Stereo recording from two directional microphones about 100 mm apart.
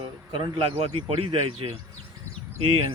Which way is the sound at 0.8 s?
70° right (ahead or behind).